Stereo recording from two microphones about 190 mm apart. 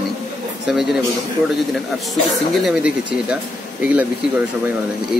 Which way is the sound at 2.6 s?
5° right (ahead or behind).